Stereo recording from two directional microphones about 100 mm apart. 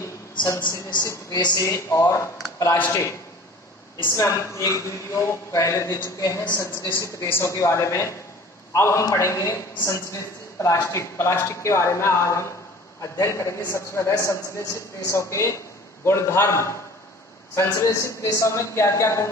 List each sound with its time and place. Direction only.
0.6 s a woman's voice: 50° left (ahead or behind)
1.7 s a man's voice: 30° left (ahead or behind)